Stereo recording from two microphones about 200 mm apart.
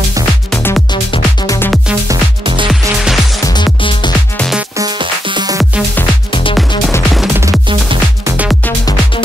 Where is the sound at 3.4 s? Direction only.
25° left (ahead or behind).